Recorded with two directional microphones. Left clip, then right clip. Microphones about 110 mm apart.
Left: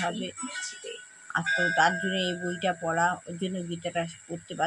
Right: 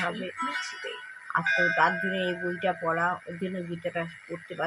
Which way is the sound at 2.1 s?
10° right (ahead or behind).